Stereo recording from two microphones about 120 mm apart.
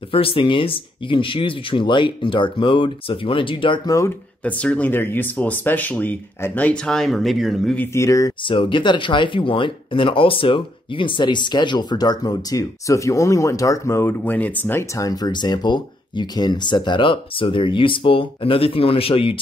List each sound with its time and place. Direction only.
0.1 s speech: 50° left (ahead or behind)
4.5 s speech: 10° left (ahead or behind)
7.7 s speech: 20° left (ahead or behind)
8.5 s speech: 45° left (ahead or behind)